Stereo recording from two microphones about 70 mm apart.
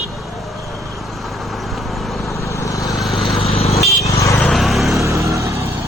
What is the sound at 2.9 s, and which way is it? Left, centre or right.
Vehicle, centre.